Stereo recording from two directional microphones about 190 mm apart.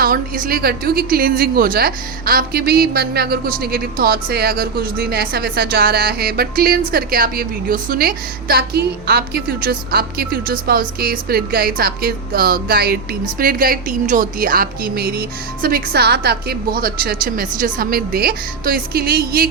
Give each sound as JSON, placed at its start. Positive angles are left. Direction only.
{"t": 0.0, "sound": "a woman's voice", "side_deg": -50}